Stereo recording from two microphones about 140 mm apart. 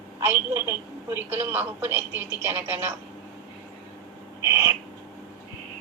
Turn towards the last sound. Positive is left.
turn(degrees=-20)  # may be behind; listen again after turning